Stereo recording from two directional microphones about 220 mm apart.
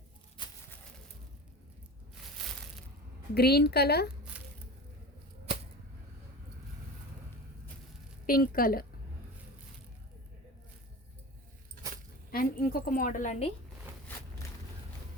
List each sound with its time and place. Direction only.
2.4 s a sound: centre (ahead or behind)
3.3 s a woman's voice: 45° left (ahead or behind)
8.3 s a woman's voice: 40° left (ahead or behind)
12.3 s a woman's voice: 40° left (ahead or behind)